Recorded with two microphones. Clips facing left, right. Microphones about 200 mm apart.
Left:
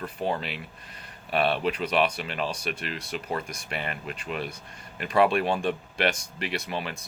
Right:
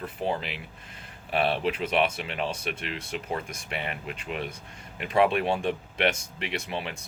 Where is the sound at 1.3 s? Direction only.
25° right (ahead or behind).